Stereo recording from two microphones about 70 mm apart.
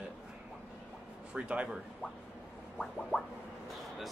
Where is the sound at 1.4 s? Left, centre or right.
Centre.